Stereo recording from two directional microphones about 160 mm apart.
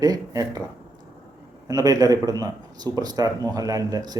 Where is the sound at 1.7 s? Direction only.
20° right (ahead or behind).